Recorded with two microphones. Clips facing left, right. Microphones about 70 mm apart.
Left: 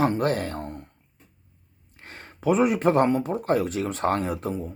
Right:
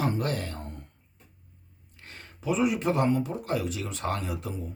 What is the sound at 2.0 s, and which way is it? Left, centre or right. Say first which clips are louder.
Speech: left 9 dB; left.